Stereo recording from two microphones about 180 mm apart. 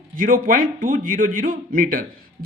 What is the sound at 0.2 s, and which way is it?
A man's voice, 50° right (ahead or behind).